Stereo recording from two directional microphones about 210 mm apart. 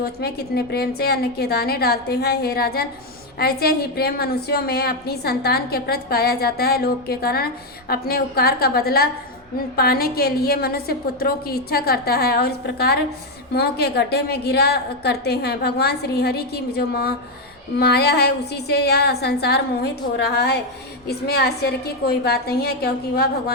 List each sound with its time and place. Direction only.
0.0 s a woman's voice: 50° left (ahead or behind)